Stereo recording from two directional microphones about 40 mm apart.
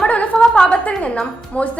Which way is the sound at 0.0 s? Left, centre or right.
Left.